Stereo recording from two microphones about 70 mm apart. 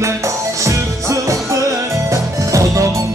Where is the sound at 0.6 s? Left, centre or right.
Right.